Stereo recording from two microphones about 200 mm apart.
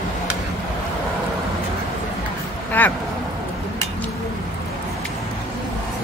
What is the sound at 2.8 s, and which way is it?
Speech, 10° left (ahead or behind).